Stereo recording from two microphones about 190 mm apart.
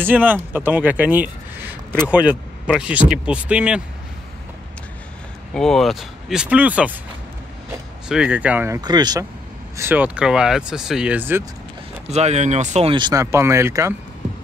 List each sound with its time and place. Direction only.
0.0 s speech: 10° right (ahead or behind)
5.5 s speech: 5° left (ahead or behind)
8.1 s speech: 5° right (ahead or behind); by 9.2 s 20° right (ahead or behind)
9.8 s speech: 10° right (ahead or behind)
12.1 s speech: 35° right (ahead or behind)
12.9 s speech: 20° right (ahead or behind)